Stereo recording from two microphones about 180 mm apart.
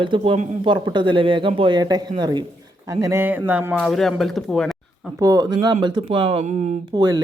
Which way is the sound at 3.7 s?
Centre (ahead or behind).